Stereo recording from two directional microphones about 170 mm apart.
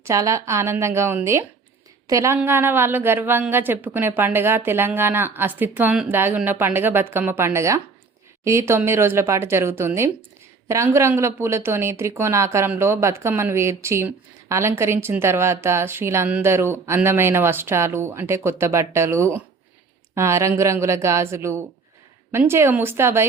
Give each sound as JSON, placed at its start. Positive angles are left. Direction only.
{"t": 0.0, "sound": "speech", "side_deg": -20}